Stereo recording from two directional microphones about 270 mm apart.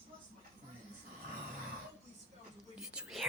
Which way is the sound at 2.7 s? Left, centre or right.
Centre.